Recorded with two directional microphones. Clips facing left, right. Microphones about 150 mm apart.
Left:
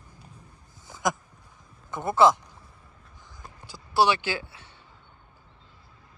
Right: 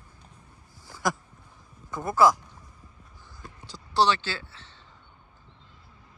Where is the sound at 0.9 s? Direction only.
20° left (ahead or behind).